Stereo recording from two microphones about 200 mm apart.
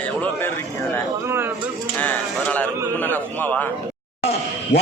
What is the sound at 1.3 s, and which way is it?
Speech, 10° right (ahead or behind).